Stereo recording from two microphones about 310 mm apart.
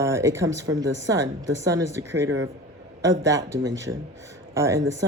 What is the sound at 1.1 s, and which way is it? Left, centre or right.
Speech, centre.